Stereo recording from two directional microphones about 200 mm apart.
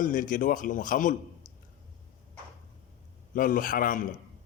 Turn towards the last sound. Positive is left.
turn(degrees=45)  # may be behind; listen again after turning